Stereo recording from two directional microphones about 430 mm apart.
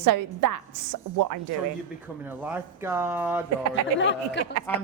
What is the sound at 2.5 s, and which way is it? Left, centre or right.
Speech, centre.